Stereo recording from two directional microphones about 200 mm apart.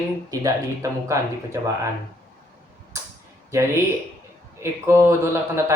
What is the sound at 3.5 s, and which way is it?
Speech, 15° right (ahead or behind).